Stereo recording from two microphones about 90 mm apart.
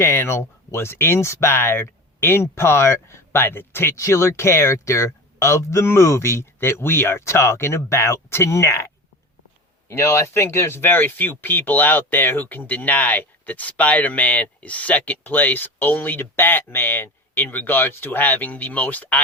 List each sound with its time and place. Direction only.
0.0 s speech: 30° left (ahead or behind)
9.9 s speech: 30° left (ahead or behind)